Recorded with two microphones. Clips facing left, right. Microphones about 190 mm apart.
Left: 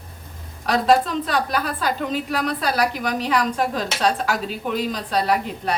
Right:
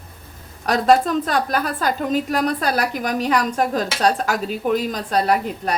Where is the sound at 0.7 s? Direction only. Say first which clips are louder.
Right 2 dB; 45° right (ahead or behind).